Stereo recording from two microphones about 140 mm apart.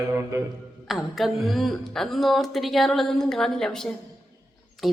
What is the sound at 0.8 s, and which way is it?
Speech, centre (ahead or behind).